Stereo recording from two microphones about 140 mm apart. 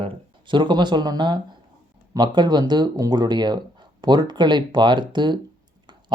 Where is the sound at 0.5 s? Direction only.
35° right (ahead or behind).